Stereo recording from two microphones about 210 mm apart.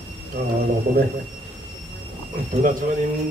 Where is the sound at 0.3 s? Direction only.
50° right (ahead or behind).